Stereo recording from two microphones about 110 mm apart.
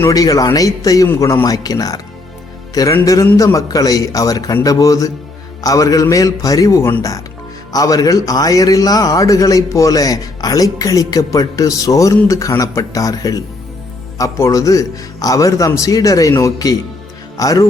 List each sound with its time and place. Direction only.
0.1 s a man's voice: 35° left (ahead or behind)